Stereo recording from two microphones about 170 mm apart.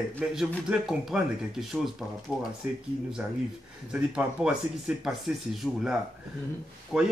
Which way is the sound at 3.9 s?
5° right (ahead or behind).